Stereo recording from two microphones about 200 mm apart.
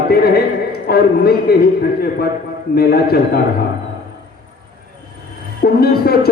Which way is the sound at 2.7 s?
50° left (ahead or behind).